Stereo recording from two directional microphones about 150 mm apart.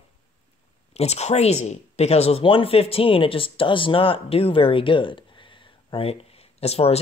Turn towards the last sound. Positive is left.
turn(degrees=45)  # may be behind; listen again after turning